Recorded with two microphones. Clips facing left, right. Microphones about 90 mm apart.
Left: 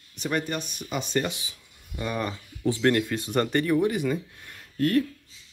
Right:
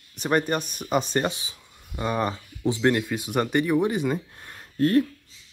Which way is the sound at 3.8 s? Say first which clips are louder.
Right 1 dB; 25° right (ahead or behind).